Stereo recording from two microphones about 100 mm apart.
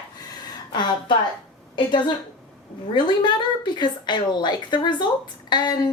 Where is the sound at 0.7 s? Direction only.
50° left (ahead or behind).